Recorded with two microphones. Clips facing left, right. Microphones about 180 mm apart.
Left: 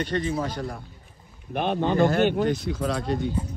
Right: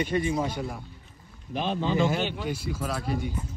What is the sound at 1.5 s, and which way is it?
Speech, 60° left (ahead or behind).